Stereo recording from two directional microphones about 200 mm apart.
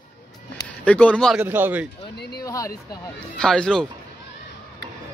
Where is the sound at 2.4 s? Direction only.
15° left (ahead or behind).